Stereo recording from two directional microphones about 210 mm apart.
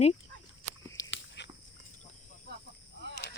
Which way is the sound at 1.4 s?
55° left (ahead or behind).